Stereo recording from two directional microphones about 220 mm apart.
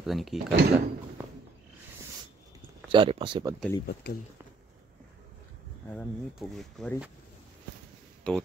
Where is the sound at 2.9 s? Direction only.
25° right (ahead or behind).